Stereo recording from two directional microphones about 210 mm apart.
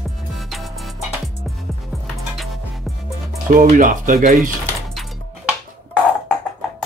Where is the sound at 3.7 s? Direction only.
40° right (ahead or behind).